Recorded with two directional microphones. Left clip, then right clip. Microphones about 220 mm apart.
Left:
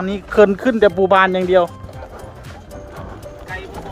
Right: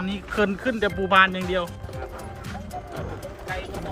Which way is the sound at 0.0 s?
25° left (ahead or behind).